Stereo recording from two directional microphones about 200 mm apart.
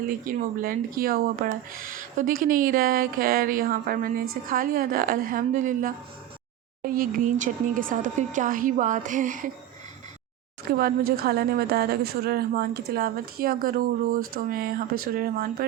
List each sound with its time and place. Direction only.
0.1 s a woman's voice: 45° right (ahead or behind)
10.7 s a woman's voice: 50° right (ahead or behind)